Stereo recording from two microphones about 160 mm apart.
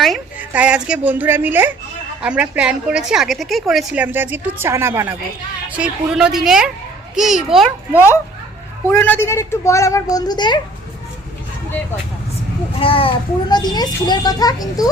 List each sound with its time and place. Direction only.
0.0 s a woman's voice: 5° right (ahead or behind)
8.9 s a child's voice: 15° left (ahead or behind)
12.8 s a child's voice: 35° left (ahead or behind)